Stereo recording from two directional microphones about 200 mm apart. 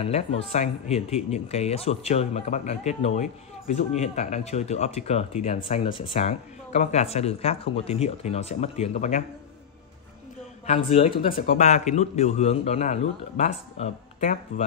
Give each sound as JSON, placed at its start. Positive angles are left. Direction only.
{"t": 0.0, "sound": "speech", "side_deg": 30}
{"t": 10.7, "sound": "speech", "side_deg": 30}